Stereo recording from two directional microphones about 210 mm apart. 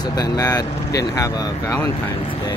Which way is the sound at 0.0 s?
20° left (ahead or behind).